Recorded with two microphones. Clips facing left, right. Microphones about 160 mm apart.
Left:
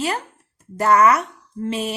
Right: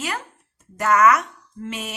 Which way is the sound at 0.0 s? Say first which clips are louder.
Left 5 dB; 30° left (ahead or behind).